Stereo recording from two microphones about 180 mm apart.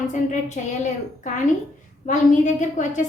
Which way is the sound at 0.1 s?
40° left (ahead or behind).